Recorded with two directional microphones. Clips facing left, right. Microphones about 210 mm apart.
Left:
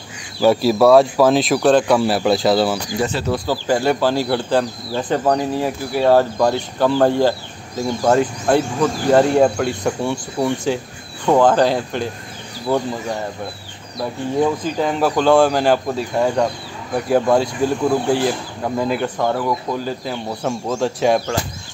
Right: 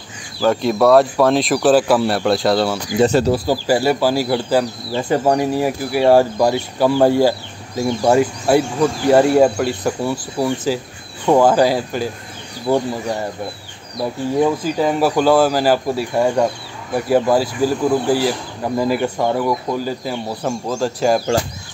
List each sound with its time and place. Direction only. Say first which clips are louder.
0.4 s speech: left 2 dB; 5° left (ahead or behind)
3.1 s speech: right 6 dB; 40° right (ahead or behind)
3.6 s speech: even; 5° right (ahead or behind)
12.7 s speech: right 2 dB; 15° right (ahead or behind)
14.4 s speech: right 2 dB; 5° right (ahead or behind)